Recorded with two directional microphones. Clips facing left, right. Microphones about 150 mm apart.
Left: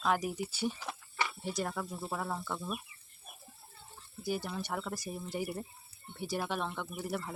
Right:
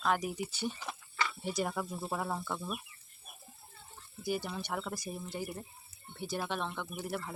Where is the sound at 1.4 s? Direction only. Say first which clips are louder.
Right 1 dB; 5° right (ahead or behind).